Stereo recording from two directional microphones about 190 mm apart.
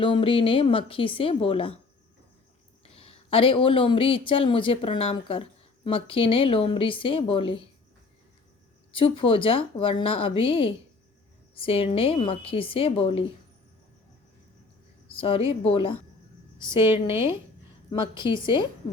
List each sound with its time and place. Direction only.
0.0 s speech: 25° left (ahead or behind)
2.9 s speech: 30° left (ahead or behind)
9.0 s speech: 30° left (ahead or behind)
15.1 s speech: 30° left (ahead or behind)
18.2 s speech: 25° left (ahead or behind)